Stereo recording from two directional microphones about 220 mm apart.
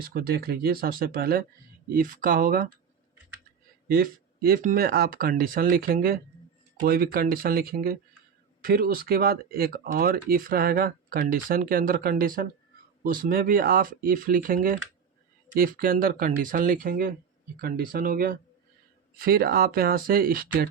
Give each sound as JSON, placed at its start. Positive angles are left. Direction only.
{"t": 0.0, "sound": "speech", "side_deg": -40}
{"t": 3.9, "sound": "speech", "side_deg": -40}